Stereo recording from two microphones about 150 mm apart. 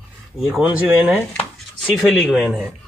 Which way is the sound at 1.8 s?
Centre (ahead or behind).